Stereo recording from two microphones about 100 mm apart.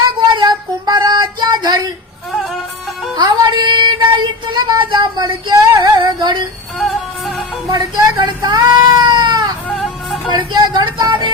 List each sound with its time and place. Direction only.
0.3 s child singing: 45° right (ahead or behind)
2.3 s music: centre (ahead or behind)
3.2 s child singing: 50° right (ahead or behind)
5.2 s female singing: 35° right (ahead or behind)
6.0 s female singing: 50° right (ahead or behind)
6.7 s music: 5° left (ahead or behind)
7.7 s cat: 40° right (ahead or behind)
9.7 s music: centre (ahead or behind)
10.2 s a sound: 50° right (ahead or behind)